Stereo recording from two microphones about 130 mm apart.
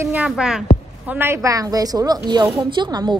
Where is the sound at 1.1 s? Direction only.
20° right (ahead or behind).